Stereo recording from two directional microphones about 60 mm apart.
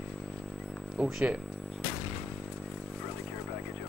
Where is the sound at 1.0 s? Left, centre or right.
Centre.